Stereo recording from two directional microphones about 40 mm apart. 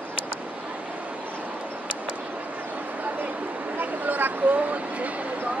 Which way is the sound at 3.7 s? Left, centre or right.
Right.